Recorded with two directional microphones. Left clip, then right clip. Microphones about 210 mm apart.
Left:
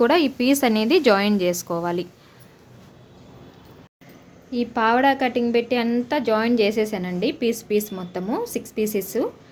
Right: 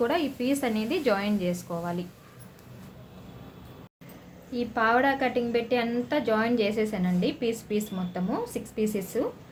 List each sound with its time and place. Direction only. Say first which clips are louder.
0.0 s a woman's voice: left 8 dB; 50° left (ahead or behind)
4.5 s a woman's voice: left 4 dB; 45° left (ahead or behind)